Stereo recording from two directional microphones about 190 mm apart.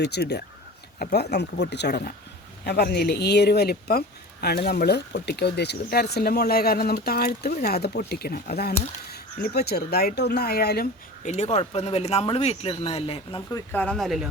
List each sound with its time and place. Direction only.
0.0 s speech: 60° left (ahead or behind)
11.2 s speech: 35° left (ahead or behind)
13.5 s speech: 5° left (ahead or behind)